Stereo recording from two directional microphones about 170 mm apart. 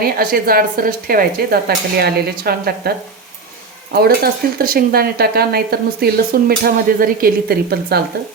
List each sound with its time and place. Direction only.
0.0 s speech: 60° right (ahead or behind)
3.9 s speech: 65° right (ahead or behind)